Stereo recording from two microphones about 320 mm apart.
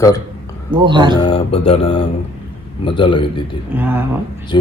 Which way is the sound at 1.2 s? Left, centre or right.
Centre.